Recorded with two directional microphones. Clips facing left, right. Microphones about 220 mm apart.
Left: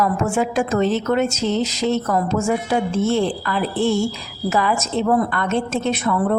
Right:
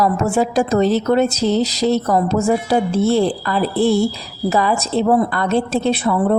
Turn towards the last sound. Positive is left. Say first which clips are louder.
# right 3 dB
turn(degrees=-30)  # may be behind; listen again after turning